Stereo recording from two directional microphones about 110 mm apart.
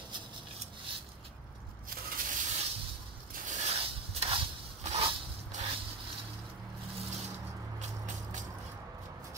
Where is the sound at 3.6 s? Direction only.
65° right (ahead or behind).